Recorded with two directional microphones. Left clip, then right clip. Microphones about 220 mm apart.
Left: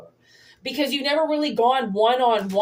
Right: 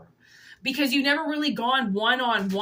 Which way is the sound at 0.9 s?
25° right (ahead or behind).